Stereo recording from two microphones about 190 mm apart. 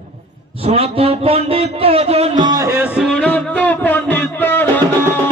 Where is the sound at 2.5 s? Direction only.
15° right (ahead or behind); by 4.6 s 10° left (ahead or behind).